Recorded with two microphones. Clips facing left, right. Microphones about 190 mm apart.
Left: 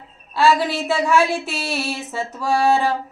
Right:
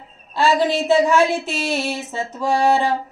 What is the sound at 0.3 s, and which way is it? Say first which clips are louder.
A woman's voice: even; 20° right (ahead or behind).